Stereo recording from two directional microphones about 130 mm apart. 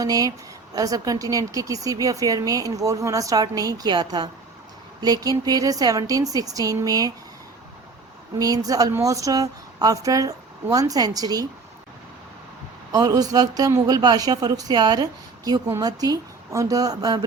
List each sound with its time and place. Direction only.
0.0 s a woman's voice: 30° right (ahead or behind)
8.4 s a woman's voice: 30° right (ahead or behind)
12.9 s a woman's voice: 30° right (ahead or behind)